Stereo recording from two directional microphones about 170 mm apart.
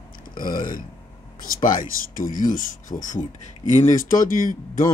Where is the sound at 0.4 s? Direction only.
55° left (ahead or behind).